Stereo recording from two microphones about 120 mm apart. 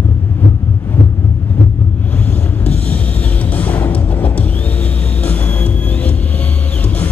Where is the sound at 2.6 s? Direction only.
15° left (ahead or behind).